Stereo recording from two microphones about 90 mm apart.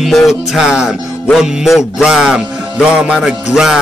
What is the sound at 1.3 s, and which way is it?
Music, 5° right (ahead or behind).